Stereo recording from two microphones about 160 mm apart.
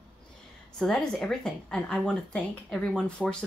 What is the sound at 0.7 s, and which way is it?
Speech, 5° left (ahead or behind).